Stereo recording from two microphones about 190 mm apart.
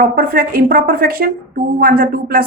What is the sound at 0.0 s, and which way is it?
A woman's voice, 50° right (ahead or behind).